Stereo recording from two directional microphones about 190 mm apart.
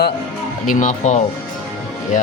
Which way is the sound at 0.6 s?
45° left (ahead or behind).